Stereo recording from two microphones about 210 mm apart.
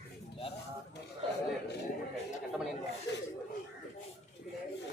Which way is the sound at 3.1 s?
55° left (ahead or behind).